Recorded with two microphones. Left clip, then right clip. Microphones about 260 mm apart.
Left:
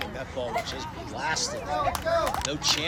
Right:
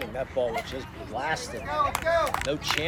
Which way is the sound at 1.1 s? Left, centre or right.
Right.